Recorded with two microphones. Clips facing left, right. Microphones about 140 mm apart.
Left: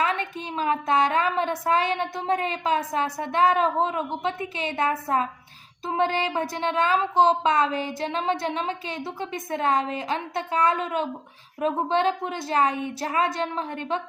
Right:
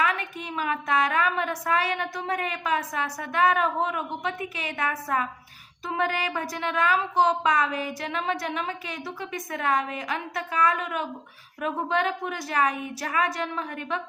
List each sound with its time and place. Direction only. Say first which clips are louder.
0.0 s speech: left 1 dB; 25° left (ahead or behind)